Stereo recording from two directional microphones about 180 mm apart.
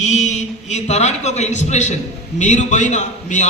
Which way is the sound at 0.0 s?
40° left (ahead or behind).